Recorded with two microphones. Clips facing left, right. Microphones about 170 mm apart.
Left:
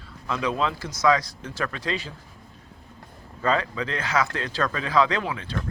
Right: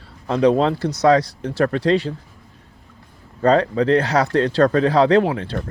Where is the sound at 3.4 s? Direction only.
40° right (ahead or behind).